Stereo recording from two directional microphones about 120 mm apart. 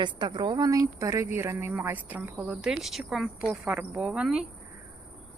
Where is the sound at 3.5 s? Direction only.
20° right (ahead or behind).